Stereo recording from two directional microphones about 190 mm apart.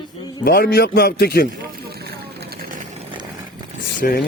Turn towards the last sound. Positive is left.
turn(degrees=50)  # may be behind; listen again after turning